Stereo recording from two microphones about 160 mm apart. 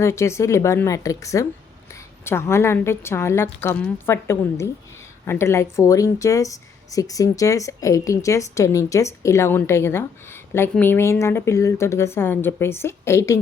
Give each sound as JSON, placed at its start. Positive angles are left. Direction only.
{"t": 0.0, "sound": "speech", "side_deg": 15}